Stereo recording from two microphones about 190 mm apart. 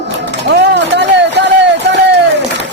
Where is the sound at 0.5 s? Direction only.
65° right (ahead or behind).